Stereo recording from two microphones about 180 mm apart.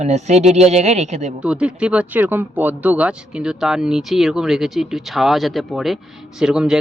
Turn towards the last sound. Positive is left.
turn(degrees=-5)  # may be behind; listen again after turning